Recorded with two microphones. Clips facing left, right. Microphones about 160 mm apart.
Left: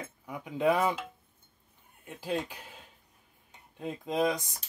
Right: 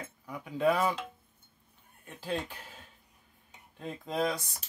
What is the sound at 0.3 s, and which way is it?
Speech, 15° left (ahead or behind).